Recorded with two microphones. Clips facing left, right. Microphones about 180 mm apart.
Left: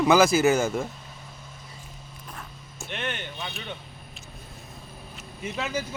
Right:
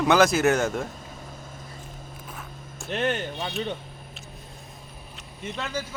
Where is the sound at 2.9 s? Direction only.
40° right (ahead or behind).